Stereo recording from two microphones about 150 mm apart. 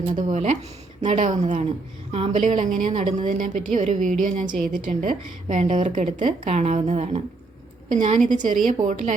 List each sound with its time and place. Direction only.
0.2 s a woman's voice: 50° right (ahead or behind)
3.2 s a woman's voice: 55° right (ahead or behind)